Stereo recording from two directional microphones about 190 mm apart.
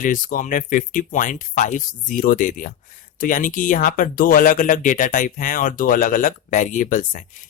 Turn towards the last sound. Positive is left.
turn(degrees=40)  # may be behind; listen again after turning